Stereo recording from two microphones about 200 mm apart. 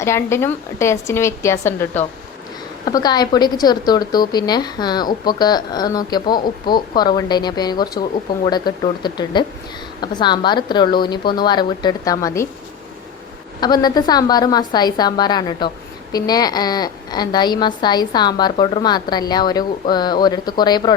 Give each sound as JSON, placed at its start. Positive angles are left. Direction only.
{"t": 0.0, "sound": "a woman's voice", "side_deg": 15}
{"t": 13.6, "sound": "a woman's voice", "side_deg": 20}